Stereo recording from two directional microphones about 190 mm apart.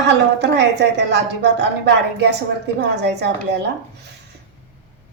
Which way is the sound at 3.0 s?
65° right (ahead or behind).